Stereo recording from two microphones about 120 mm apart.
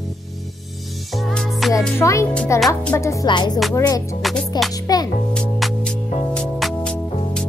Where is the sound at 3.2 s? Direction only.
40° left (ahead or behind).